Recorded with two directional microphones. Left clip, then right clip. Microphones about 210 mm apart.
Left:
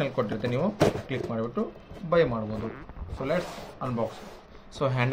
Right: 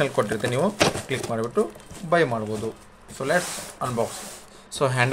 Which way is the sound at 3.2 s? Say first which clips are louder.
Right 5 dB; 50° right (ahead or behind).